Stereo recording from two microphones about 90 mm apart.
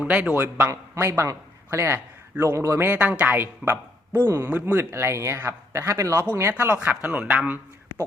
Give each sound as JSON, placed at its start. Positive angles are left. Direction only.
{"t": 0.0, "sound": "a man's voice", "side_deg": -15}
{"t": 0.4, "sound": "a man's voice", "side_deg": -25}
{"t": 2.8, "sound": "speech", "side_deg": -15}
{"t": 6.5, "sound": "speech", "side_deg": -20}